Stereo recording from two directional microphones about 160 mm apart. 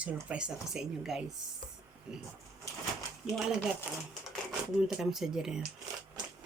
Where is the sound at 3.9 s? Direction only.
10° right (ahead or behind).